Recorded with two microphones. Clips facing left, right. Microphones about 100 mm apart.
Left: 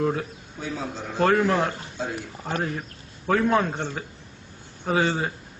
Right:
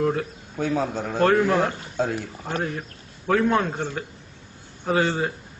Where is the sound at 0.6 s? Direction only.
50° right (ahead or behind).